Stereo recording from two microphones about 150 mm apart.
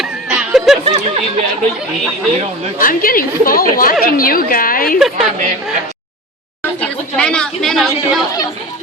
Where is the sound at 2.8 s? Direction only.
70° left (ahead or behind).